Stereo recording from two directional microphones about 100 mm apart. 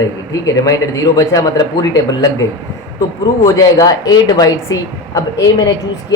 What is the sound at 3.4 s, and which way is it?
A woman's voice, 35° left (ahead or behind).